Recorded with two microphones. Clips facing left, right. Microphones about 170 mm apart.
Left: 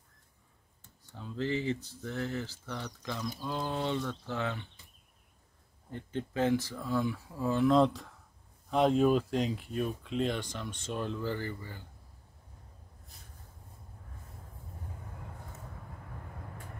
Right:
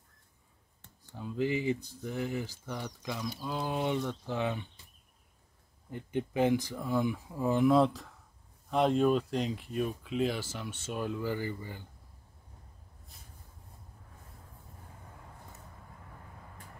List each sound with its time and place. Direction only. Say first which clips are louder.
1.1 s speech: right 2 dB; 15° right (ahead or behind)
5.9 s speech: right 3 dB; 15° right (ahead or behind)
7.8 s speech: left 1 dB; centre (ahead or behind)